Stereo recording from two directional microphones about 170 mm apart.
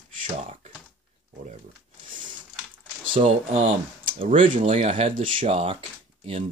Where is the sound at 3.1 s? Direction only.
35° right (ahead or behind).